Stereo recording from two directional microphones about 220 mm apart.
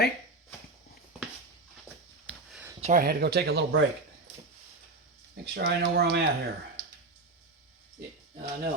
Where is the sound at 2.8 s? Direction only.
40° right (ahead or behind).